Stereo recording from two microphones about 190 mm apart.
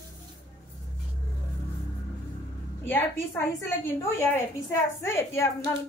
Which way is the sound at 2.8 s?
10° left (ahead or behind).